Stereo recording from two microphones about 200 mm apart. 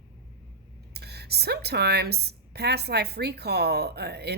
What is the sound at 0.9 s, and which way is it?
Speech, 55° right (ahead or behind).